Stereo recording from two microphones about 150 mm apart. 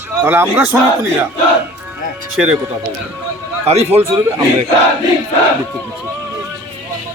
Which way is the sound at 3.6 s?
45° right (ahead or behind).